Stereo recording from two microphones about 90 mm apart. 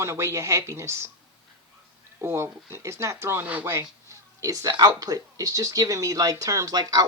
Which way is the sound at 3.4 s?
20° right (ahead or behind).